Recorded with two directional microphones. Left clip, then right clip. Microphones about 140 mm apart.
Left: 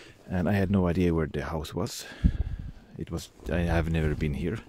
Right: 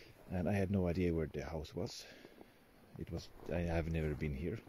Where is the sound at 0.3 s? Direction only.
40° left (ahead or behind).